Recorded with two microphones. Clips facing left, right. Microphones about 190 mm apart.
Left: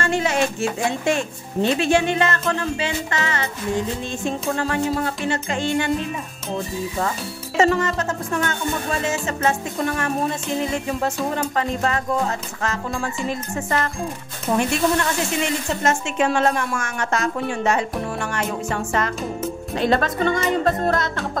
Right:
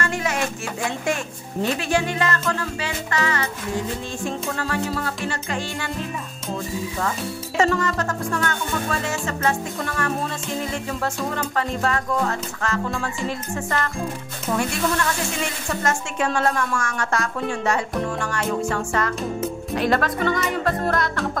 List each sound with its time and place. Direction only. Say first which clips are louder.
0.0 s speech: left 4 dB; 25° left (ahead or behind)
7.5 s speech: left 2 dB; 20° left (ahead or behind)